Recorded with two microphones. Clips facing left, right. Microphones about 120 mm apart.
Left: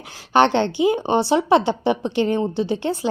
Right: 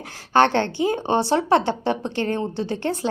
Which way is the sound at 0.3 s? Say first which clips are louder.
Left 2 dB; 20° left (ahead or behind).